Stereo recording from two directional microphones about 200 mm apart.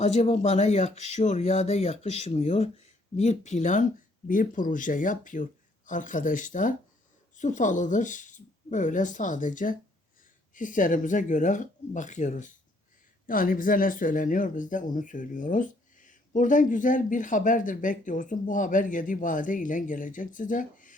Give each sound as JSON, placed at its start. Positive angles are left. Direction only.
{"t": 0.0, "sound": "speech", "side_deg": 30}